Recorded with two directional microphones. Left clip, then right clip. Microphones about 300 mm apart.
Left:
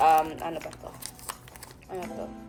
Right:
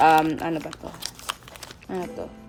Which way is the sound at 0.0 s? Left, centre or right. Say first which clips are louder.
Right 4 dB; right.